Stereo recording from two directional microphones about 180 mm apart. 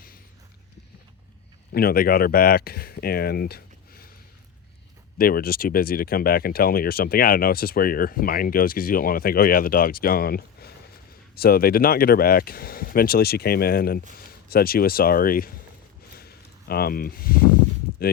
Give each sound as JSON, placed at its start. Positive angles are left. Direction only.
{"t": 1.7, "sound": "speech", "side_deg": 55}
{"t": 5.1, "sound": "speech", "side_deg": 55}
{"t": 16.1, "sound": "a sound", "side_deg": 60}